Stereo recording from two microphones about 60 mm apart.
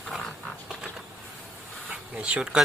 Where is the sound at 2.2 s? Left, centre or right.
Centre.